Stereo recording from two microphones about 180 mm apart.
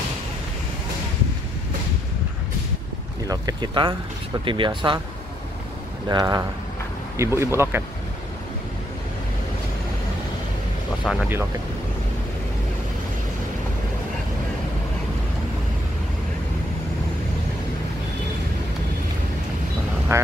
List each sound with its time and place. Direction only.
3.3 s speech: 25° right (ahead or behind)
6.0 s speech: 20° right (ahead or behind)
11.1 s speech: centre (ahead or behind)
20.1 s speech: 15° right (ahead or behind)